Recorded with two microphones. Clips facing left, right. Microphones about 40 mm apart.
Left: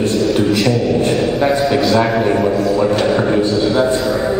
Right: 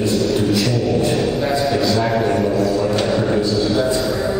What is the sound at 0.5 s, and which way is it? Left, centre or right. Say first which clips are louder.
Music: left 3 dB; centre.